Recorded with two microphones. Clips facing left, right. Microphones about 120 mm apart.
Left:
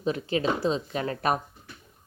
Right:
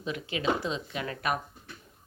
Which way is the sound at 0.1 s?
35° left (ahead or behind).